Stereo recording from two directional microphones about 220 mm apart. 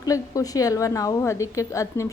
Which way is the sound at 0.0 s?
15° left (ahead or behind).